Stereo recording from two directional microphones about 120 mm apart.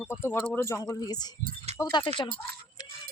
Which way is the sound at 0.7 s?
25° left (ahead or behind).